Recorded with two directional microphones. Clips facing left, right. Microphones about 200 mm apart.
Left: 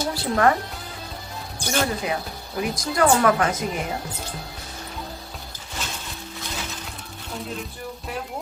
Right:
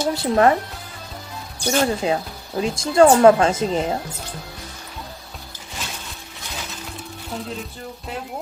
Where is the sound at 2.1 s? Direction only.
30° right (ahead or behind).